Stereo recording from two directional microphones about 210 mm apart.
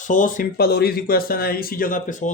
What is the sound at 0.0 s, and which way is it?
Speech, 40° left (ahead or behind).